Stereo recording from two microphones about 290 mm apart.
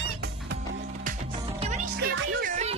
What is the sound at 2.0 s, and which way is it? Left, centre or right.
Music, right.